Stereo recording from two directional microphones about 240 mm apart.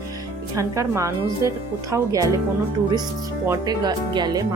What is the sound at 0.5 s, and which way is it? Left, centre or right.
Speech, centre.